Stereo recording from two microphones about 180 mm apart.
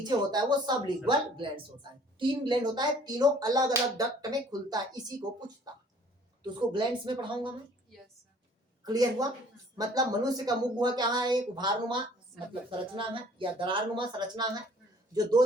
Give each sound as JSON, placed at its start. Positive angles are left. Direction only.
{"t": 0.0, "sound": "speech", "side_deg": -25}
{"t": 8.8, "sound": "speech", "side_deg": -20}
{"t": 13.0, "sound": "speech", "side_deg": -30}